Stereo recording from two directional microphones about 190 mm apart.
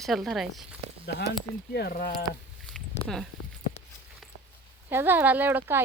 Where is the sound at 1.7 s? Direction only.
55° left (ahead or behind).